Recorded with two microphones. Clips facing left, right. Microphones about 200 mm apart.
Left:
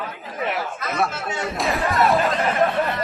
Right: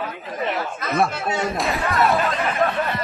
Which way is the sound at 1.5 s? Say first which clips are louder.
Left 1 dB; centre (ahead or behind).